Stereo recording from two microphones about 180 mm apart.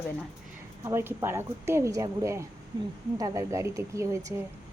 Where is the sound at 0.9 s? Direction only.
15° right (ahead or behind).